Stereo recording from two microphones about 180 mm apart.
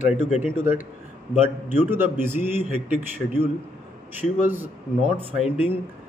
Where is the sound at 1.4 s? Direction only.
10° right (ahead or behind).